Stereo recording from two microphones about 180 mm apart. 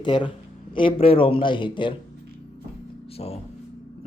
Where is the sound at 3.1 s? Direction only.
35° left (ahead or behind).